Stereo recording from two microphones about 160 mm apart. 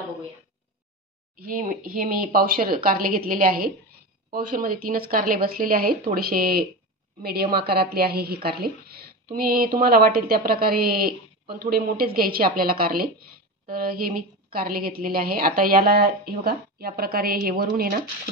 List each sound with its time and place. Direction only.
1.4 s a woman's voice: 55° right (ahead or behind)